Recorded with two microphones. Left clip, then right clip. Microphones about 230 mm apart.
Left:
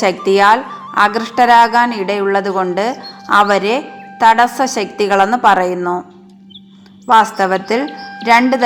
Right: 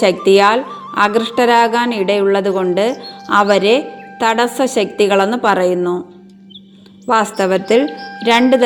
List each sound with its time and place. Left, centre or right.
0.3 s a woman's voice: right
7.1 s a woman's voice: right
7.9 s speech: centre
8.2 s a woman's voice: right